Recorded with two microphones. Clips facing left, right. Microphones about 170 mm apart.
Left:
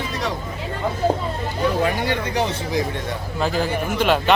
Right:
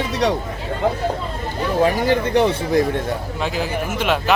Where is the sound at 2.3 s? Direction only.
60° right (ahead or behind).